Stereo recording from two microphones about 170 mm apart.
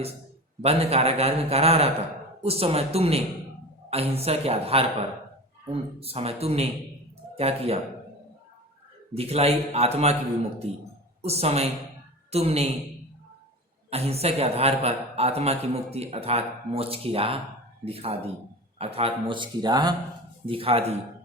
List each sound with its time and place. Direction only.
0.6 s a man's voice: 35° right (ahead or behind)
9.1 s a man's voice: 35° right (ahead or behind)
11.2 s a man's voice: 35° right (ahead or behind)
13.9 s a man's voice: 35° right (ahead or behind)